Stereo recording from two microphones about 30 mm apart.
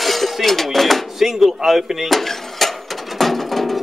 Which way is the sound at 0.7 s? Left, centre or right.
Centre.